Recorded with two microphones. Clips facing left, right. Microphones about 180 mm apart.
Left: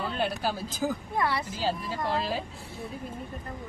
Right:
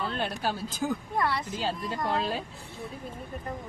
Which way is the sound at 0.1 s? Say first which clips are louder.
Left 1 dB; 5° left (ahead or behind).